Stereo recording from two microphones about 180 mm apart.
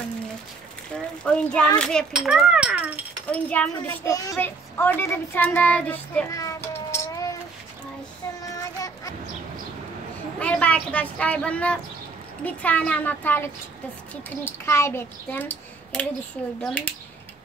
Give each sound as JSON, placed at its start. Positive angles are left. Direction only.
{"t": 1.2, "sound": "a child's voice", "side_deg": 5}
{"t": 3.3, "sound": "speech", "side_deg": 5}
{"t": 6.3, "sound": "a sound", "side_deg": 15}
{"t": 8.5, "sound": "child singing", "side_deg": 20}
{"t": 10.4, "sound": "speech", "side_deg": 5}